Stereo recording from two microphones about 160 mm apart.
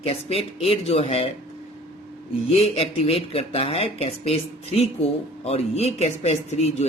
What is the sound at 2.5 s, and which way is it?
Speech, 40° left (ahead or behind).